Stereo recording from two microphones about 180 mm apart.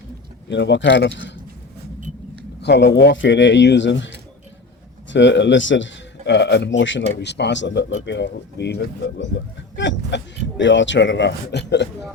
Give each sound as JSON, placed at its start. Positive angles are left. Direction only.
{"t": 0.4, "sound": "speech", "side_deg": 75}
{"t": 2.6, "sound": "speech", "side_deg": 70}
{"t": 5.1, "sound": "speech", "side_deg": 80}
{"t": 7.2, "sound": "speech", "side_deg": 70}
{"t": 9.7, "sound": "speech", "side_deg": 85}